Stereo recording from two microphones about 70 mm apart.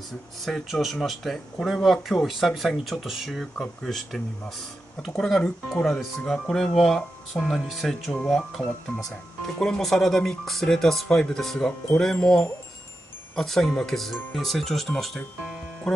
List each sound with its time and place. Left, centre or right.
0.5 s speech: centre